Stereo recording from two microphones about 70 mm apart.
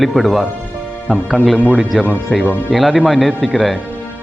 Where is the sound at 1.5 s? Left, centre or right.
Centre.